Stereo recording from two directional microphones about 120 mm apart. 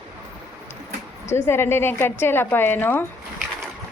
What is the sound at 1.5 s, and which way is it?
A woman's voice, 20° left (ahead or behind).